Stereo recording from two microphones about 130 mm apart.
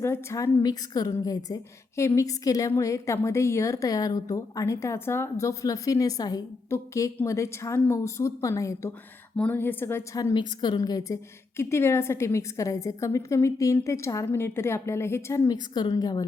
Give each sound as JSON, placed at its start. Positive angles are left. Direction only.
{"t": 0.0, "sound": "a woman's voice", "side_deg": 20}
{"t": 9.3, "sound": "speech", "side_deg": 10}
{"t": 10.6, "sound": "a woman's voice", "side_deg": 30}
{"t": 15.7, "sound": "a woman's voice", "side_deg": 35}